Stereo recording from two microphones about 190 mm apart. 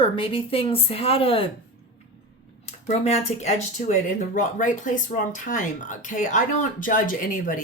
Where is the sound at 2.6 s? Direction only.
35° left (ahead or behind).